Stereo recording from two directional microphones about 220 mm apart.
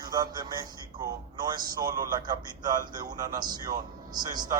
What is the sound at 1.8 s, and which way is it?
Speech, 15° right (ahead or behind).